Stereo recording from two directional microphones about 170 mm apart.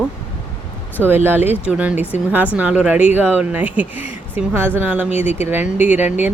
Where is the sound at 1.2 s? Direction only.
10° right (ahead or behind).